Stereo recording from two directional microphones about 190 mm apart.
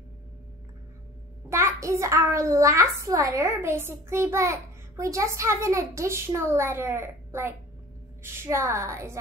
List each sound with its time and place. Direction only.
1.5 s a child's voice: 15° right (ahead or behind)